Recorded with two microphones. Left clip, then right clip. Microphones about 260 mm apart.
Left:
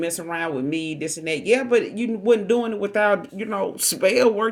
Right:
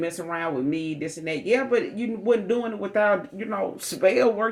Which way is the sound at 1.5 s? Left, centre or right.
Left.